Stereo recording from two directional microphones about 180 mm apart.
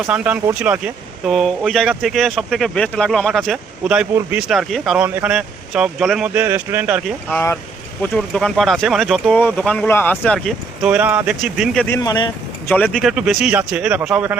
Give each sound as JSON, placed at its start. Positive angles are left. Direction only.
{"t": 0.1, "sound": "speech", "side_deg": -5}
{"t": 7.3, "sound": "speech", "side_deg": 10}
{"t": 10.8, "sound": "speech", "side_deg": -10}
{"t": 11.9, "sound": "speech", "side_deg": 20}
{"t": 12.6, "sound": "speech", "side_deg": 5}